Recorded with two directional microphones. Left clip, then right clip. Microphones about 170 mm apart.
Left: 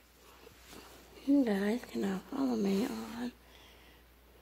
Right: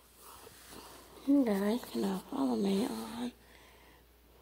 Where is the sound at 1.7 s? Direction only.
15° right (ahead or behind).